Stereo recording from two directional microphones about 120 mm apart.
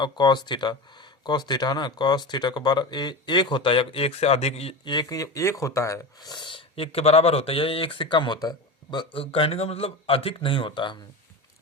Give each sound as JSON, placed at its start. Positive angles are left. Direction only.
{"t": 0.0, "sound": "speech", "side_deg": 35}
{"t": 4.9, "sound": "speech", "side_deg": 35}